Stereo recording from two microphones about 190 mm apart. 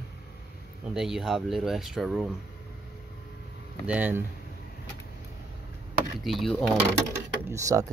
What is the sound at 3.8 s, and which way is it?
Speech, 10° right (ahead or behind).